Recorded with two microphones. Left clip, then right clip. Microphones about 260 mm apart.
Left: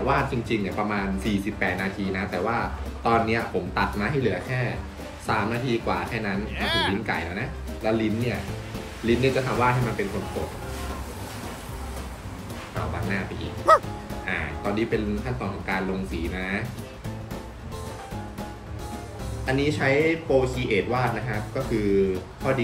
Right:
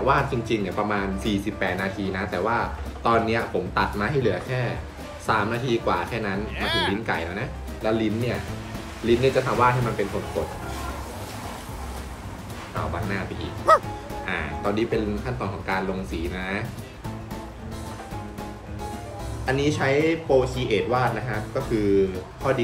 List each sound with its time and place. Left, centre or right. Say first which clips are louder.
0.0 s speech: right 2 dB; centre
7.1 s speech: right 1 dB; centre
13.7 s speech: even; centre
14.2 s music: right 1 dB; centre
15.6 s speech: right 1 dB; centre
19.4 s speech: right 1 dB; centre